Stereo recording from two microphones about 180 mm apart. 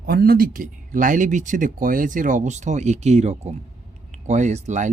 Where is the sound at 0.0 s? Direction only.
60° right (ahead or behind).